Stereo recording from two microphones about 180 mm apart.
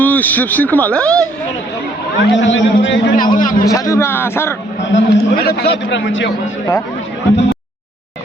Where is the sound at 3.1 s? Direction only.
50° left (ahead or behind).